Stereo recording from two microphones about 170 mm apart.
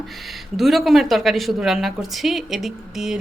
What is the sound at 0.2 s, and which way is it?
A woman's voice, centre (ahead or behind).